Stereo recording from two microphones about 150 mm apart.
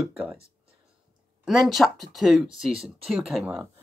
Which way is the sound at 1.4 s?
5° right (ahead or behind).